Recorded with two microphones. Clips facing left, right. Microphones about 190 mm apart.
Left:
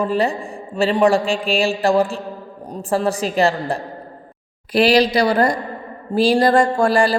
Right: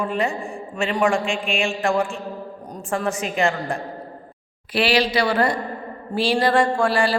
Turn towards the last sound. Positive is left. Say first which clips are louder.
# left 4 dB
turn(degrees=40)  # may be behind; listen again after turning